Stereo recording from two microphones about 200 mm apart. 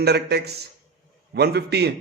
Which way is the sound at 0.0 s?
55° right (ahead or behind).